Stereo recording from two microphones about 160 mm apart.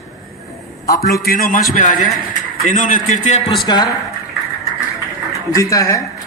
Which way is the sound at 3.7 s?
25° left (ahead or behind).